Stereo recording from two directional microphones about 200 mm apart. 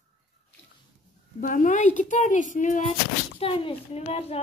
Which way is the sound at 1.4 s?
40° left (ahead or behind).